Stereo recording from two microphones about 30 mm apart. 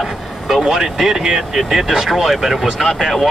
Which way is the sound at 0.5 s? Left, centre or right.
Centre.